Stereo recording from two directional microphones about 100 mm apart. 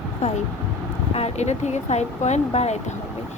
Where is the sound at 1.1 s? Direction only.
90° left.